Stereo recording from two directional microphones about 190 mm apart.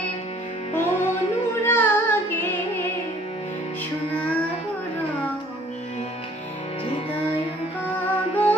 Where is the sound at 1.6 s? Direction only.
10° left (ahead or behind).